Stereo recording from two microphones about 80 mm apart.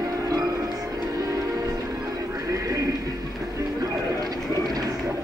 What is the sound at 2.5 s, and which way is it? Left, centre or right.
Music, right.